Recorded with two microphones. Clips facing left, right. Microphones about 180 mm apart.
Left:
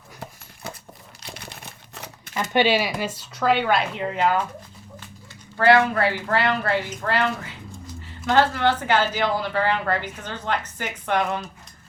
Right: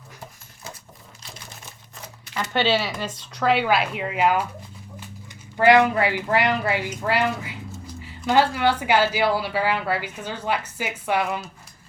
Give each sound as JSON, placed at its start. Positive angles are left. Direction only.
{"t": 1.2, "sound": "typewriter", "side_deg": 65}
{"t": 2.3, "sound": "speech", "side_deg": 15}
{"t": 5.5, "sound": "speech", "side_deg": -15}